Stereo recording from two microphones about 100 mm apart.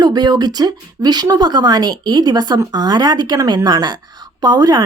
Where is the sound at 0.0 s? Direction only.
45° right (ahead or behind).